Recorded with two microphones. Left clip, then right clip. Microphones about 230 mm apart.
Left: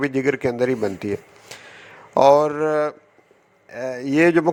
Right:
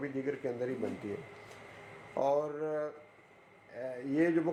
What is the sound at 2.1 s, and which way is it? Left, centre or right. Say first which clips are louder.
A man's voice: left 17 dB; left.